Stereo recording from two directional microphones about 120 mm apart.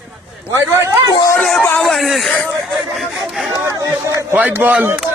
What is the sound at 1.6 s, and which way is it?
Speech, 15° left (ahead or behind).